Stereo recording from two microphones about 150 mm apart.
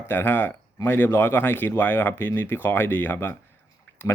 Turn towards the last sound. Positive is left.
turn(degrees=15)  # may be behind; listen again after turning